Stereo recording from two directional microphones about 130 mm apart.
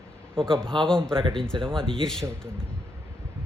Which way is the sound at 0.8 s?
5° left (ahead or behind).